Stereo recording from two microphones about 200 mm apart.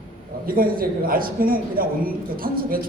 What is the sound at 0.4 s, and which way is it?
A man's voice, 45° right (ahead or behind).